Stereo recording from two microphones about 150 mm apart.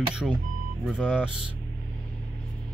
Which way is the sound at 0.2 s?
Centre (ahead or behind).